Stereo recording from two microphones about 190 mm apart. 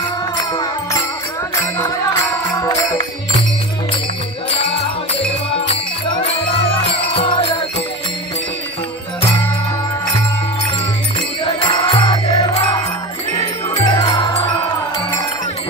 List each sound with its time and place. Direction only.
2.5 s music: 20° left (ahead or behind)
7.2 s jingle bell: 25° left (ahead or behind)
11.4 s music: 25° left (ahead or behind)
13.8 s music: 30° left (ahead or behind)